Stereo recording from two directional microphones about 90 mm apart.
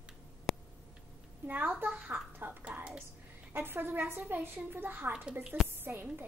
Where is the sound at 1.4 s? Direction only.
20° right (ahead or behind).